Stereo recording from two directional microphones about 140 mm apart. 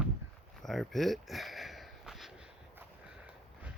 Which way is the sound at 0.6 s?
Centre (ahead or behind).